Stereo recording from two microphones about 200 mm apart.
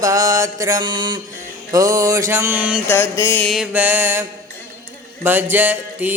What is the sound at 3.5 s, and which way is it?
Mantra, 5° right (ahead or behind).